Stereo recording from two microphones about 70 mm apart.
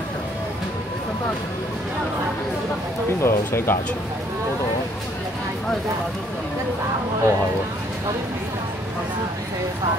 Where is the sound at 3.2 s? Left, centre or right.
Left.